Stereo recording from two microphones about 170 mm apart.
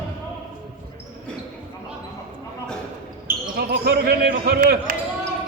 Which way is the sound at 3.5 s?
65° right (ahead or behind).